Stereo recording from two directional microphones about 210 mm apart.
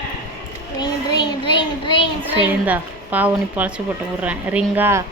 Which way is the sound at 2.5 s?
5° right (ahead or behind).